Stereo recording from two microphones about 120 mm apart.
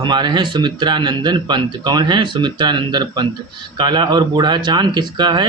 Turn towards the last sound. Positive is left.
turn(degrees=-35)  # may be behind; listen again after turning